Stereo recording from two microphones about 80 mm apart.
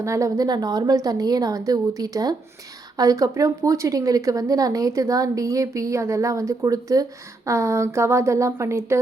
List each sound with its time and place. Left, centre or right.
0.0 s a woman's voice: right
7.5 s speech: right